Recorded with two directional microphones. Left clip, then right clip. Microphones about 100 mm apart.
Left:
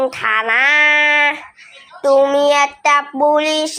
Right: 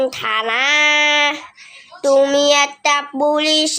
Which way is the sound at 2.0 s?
40° right (ahead or behind).